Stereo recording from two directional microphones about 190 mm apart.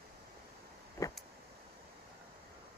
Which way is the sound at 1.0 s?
15° left (ahead or behind).